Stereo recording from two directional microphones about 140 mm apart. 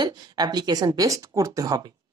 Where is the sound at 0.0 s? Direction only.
30° right (ahead or behind).